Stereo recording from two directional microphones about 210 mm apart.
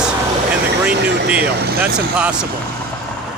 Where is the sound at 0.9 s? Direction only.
55° right (ahead or behind).